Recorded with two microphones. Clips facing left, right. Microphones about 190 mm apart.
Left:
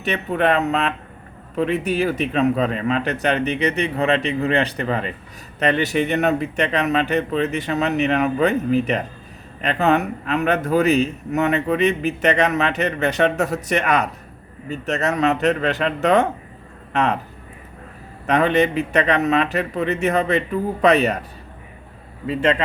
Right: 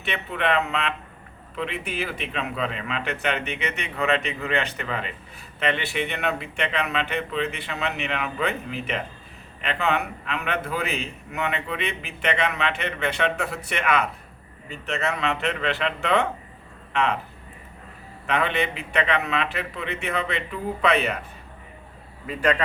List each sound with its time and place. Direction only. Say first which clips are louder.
0.0 s a man's voice: left 7 dB; 40° left (ahead or behind)
18.3 s a man's voice: left 8 dB; 40° left (ahead or behind)
22.3 s a man's voice: left 4 dB; 25° left (ahead or behind)